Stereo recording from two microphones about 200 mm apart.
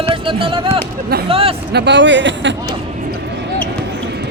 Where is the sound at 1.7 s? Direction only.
55° right (ahead or behind).